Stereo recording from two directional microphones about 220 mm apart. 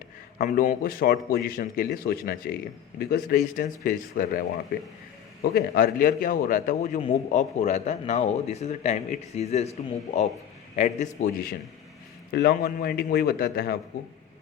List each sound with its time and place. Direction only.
0.3 s a man's voice: 35° left (ahead or behind)